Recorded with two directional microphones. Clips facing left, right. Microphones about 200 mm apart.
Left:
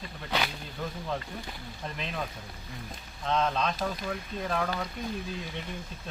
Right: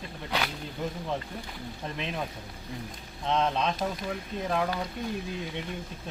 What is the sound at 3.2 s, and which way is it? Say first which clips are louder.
Speech: right 1 dB; 20° right (ahead or behind).